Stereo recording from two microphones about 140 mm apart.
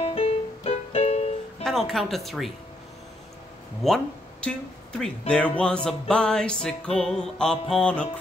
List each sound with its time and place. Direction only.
0.0 s music: 40° left (ahead or behind)
1.6 s music: centre (ahead or behind)
3.8 s speech: 5° left (ahead or behind)
5.9 s music: 5° left (ahead or behind)
7.7 s speech: 5° left (ahead or behind)